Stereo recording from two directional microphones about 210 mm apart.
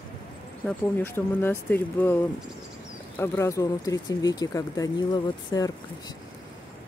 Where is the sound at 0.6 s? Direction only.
10° left (ahead or behind).